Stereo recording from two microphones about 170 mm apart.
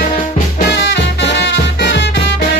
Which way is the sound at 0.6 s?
90° left.